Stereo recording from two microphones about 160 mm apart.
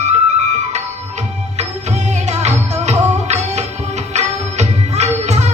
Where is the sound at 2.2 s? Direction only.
45° right (ahead or behind).